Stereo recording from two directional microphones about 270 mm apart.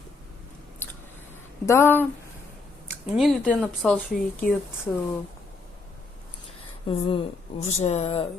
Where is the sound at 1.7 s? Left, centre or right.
Centre.